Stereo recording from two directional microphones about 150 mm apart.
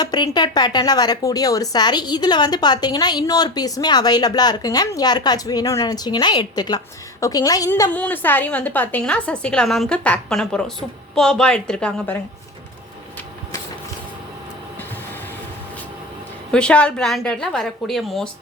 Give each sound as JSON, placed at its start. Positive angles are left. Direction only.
{"t": 0.0, "sound": "a woman's voice", "side_deg": 30}
{"t": 7.7, "sound": "a woman's voice", "side_deg": 10}
{"t": 16.5, "sound": "a woman's voice", "side_deg": 5}